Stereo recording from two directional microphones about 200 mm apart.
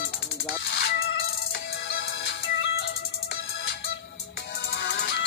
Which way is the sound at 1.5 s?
55° left (ahead or behind).